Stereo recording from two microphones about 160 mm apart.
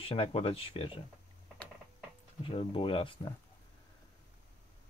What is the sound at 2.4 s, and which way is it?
Speech, 35° left (ahead or behind).